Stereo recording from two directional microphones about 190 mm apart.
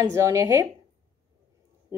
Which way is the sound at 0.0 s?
15° right (ahead or behind).